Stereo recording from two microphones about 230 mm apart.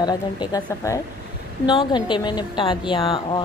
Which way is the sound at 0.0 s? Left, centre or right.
Centre.